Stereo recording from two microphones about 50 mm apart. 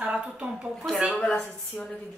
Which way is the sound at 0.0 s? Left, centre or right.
Centre.